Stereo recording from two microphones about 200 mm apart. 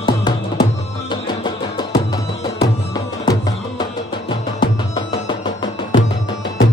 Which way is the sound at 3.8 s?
25° left (ahead or behind).